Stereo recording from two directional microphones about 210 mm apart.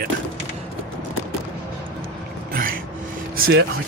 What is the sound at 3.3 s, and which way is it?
Speech, 50° right (ahead or behind).